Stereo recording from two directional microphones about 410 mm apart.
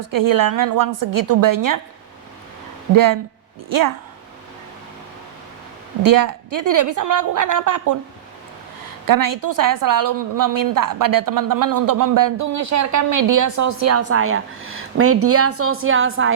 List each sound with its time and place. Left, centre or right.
0.0 s a woman's voice: right
2.9 s a woman's voice: right
6.1 s a woman's voice: right
9.0 s a woman's voice: right